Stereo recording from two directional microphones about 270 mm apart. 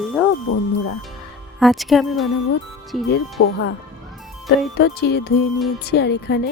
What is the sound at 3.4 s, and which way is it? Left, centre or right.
Speech, left.